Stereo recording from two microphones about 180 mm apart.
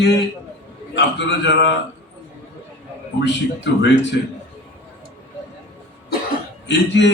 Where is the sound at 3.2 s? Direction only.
80° left.